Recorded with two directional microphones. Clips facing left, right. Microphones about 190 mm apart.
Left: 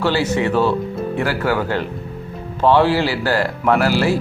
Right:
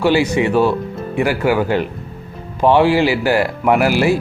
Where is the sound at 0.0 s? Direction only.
15° right (ahead or behind).